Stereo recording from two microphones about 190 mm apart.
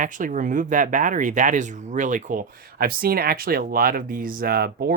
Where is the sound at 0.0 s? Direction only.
45° right (ahead or behind).